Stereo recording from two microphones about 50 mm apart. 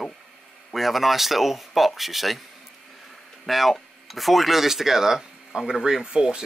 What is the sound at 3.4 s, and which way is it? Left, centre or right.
Speech, centre.